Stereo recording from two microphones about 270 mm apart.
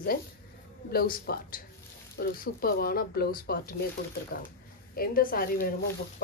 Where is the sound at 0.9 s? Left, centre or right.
Left.